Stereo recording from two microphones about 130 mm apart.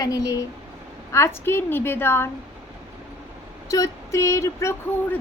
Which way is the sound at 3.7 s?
25° left (ahead or behind).